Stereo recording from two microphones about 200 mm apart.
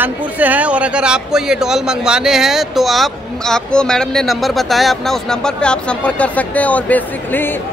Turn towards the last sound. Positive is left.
turn(degrees=10)  # may be behind; listen again after turning